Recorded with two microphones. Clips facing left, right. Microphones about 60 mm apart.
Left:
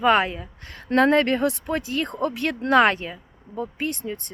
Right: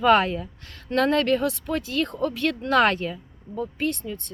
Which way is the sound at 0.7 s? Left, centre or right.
Left.